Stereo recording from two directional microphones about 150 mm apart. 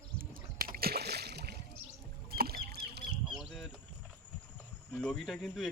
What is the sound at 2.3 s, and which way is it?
Rowboat, 90° right.